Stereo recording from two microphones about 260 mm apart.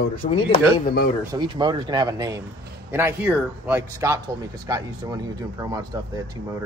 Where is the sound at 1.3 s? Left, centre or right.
Centre.